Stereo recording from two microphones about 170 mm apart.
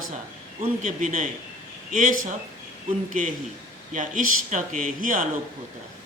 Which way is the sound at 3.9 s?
50° right (ahead or behind).